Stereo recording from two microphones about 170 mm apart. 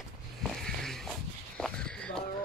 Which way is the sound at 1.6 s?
5° left (ahead or behind).